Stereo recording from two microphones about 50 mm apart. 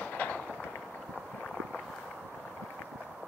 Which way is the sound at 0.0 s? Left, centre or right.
Left.